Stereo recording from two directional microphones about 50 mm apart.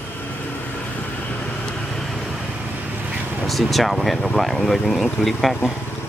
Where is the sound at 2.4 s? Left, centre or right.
Right.